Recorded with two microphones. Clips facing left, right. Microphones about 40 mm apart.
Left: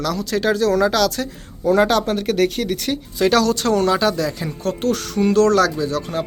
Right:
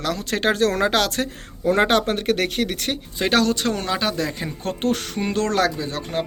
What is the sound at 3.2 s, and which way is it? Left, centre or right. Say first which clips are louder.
Speech: left 3 dB; right.